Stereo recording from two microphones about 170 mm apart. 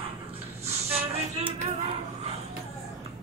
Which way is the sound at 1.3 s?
40° right (ahead or behind).